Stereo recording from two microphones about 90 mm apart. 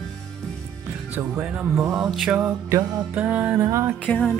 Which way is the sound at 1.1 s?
15° right (ahead or behind).